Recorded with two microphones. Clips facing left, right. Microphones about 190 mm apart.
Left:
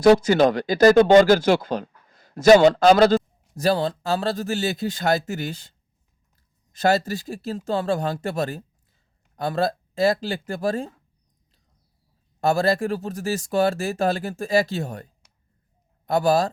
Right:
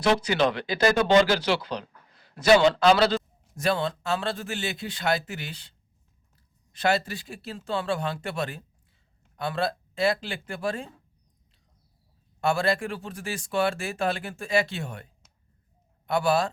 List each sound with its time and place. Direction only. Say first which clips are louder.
0.0 s speech: left 8 dB; 45° left (ahead or behind)
12.4 s speech: left 5 dB; 40° left (ahead or behind)